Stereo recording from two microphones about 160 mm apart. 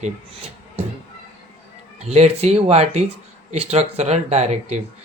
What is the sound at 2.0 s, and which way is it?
Speech, 40° right (ahead or behind).